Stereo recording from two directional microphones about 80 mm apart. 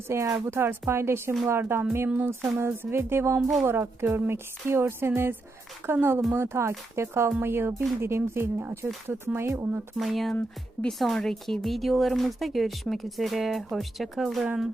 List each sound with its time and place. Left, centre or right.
0.1 s speech: right
0.3 s speech: right
2.0 s music: right
6.3 s speech: right
10.0 s speech: centre